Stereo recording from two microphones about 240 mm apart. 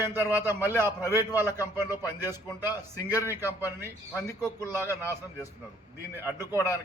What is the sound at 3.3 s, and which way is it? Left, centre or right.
Speech, centre.